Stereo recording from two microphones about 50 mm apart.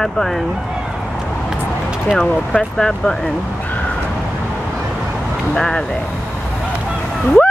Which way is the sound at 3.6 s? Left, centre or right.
Left.